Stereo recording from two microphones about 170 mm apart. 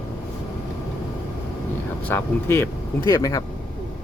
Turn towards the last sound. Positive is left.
turn(degrees=20)  # may be behind; listen again after turning